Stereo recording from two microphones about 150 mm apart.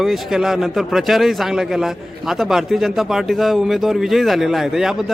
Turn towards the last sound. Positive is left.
turn(degrees=-5)  # may be behind; listen again after turning